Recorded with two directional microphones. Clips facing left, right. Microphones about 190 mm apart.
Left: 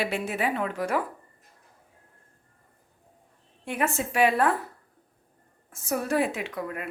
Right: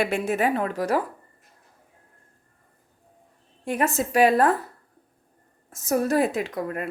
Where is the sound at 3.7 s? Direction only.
40° right (ahead or behind).